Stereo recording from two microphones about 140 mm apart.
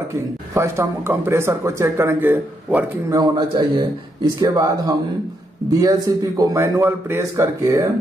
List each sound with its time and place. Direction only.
0.6 s speech: 20° right (ahead or behind)
3.1 s a man's voice: 30° right (ahead or behind)